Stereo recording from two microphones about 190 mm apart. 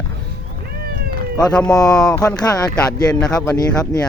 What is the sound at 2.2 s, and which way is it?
Speech, 20° left (ahead or behind).